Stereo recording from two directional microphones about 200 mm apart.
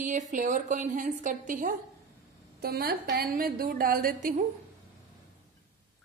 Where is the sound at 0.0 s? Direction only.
40° right (ahead or behind).